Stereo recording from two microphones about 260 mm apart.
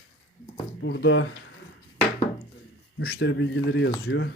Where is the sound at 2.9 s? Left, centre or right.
Left.